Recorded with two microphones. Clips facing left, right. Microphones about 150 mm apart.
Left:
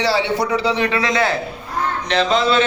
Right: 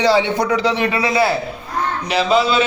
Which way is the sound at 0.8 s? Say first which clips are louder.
Right 1 dB; 20° right (ahead or behind).